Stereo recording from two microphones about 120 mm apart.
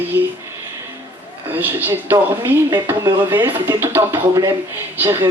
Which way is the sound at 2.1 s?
25° right (ahead or behind).